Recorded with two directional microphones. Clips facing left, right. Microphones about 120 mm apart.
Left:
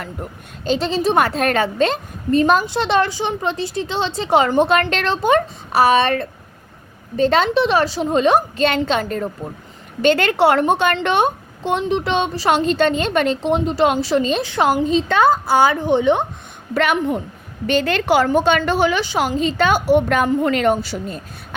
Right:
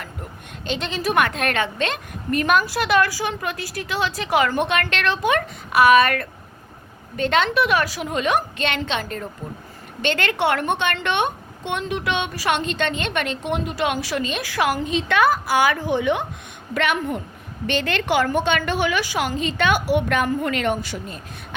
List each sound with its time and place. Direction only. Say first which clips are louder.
0.0 s a woman's voice: left 5 dB; 40° left (ahead or behind)
16.7 s a woman's voice: left 4 dB; 40° left (ahead or behind)